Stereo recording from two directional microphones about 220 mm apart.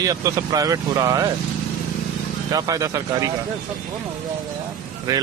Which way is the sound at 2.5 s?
15° right (ahead or behind).